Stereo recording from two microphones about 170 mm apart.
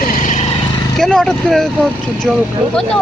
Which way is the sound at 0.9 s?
Centre (ahead or behind).